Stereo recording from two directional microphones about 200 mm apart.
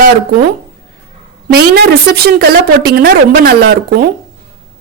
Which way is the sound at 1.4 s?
50° right (ahead or behind).